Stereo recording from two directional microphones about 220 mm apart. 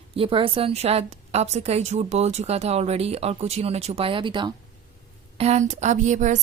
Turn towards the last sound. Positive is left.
turn(degrees=-35)  # may be behind; listen again after turning